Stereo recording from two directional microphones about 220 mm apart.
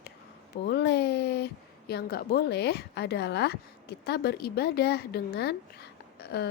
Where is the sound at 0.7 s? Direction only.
50° left (ahead or behind).